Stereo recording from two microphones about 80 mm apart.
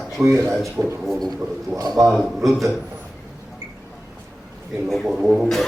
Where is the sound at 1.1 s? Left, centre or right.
Centre.